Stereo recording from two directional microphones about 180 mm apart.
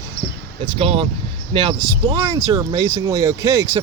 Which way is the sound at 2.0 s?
25° right (ahead or behind).